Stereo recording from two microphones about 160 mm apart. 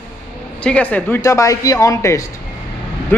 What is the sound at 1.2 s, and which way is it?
A man's voice, 20° left (ahead or behind).